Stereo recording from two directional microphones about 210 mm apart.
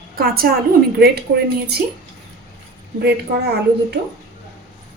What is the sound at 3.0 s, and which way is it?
Speech, 50° right (ahead or behind).